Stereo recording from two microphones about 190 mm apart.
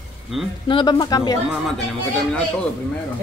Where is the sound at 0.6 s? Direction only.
25° left (ahead or behind).